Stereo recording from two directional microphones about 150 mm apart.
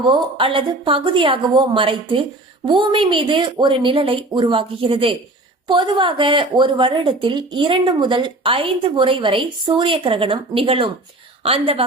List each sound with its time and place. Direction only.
0.0 s a woman's voice: 35° right (ahead or behind)